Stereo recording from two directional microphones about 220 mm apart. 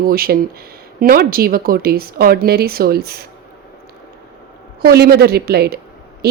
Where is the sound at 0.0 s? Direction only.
45° right (ahead or behind).